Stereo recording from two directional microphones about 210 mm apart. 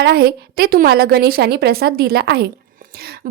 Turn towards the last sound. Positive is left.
turn(degrees=-45)  # may be behind; listen again after turning